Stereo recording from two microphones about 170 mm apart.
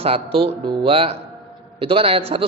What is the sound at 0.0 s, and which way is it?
A man's voice, 35° right (ahead or behind).